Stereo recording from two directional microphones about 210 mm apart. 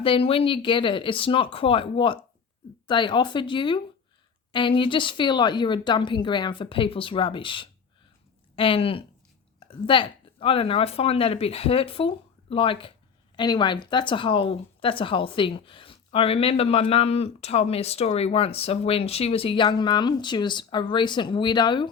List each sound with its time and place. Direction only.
0.0 s speech: 25° left (ahead or behind)